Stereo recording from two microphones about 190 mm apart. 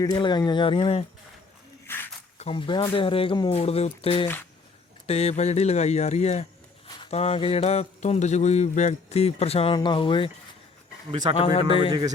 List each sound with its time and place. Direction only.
0.0 s speech: 25° left (ahead or behind)
1.9 s a sound: 10° left (ahead or behind)
2.4 s speech: 25° left (ahead or behind)
11.3 s speech: 30° left (ahead or behind)